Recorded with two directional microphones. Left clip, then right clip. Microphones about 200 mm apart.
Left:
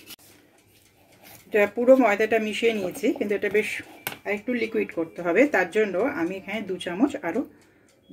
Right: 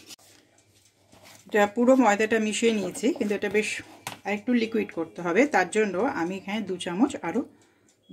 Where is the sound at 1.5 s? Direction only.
40° right (ahead or behind).